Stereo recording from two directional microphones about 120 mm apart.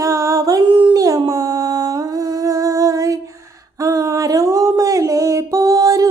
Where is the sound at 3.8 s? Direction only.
25° right (ahead or behind).